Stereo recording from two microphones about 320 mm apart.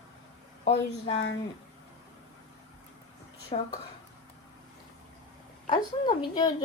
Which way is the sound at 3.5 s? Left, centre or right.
Centre.